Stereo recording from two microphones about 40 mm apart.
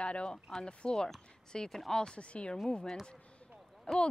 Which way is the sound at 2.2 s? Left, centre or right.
Left.